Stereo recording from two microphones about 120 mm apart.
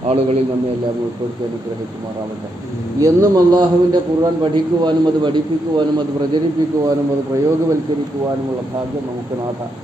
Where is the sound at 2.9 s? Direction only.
30° right (ahead or behind).